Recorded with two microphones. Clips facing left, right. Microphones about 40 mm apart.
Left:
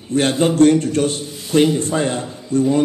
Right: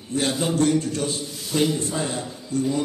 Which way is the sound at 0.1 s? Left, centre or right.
Left.